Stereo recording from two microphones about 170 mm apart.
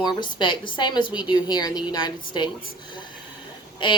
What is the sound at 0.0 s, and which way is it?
A woman's voice, 25° left (ahead or behind).